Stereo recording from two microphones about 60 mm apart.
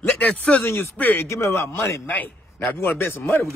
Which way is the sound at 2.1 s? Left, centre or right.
Left.